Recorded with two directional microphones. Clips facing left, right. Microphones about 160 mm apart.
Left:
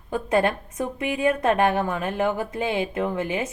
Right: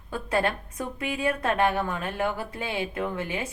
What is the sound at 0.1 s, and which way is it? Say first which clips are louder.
A woman's voice: left 5 dB; 20° left (ahead or behind).